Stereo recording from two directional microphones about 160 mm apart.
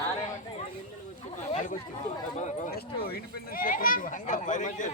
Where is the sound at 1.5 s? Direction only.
50° left (ahead or behind).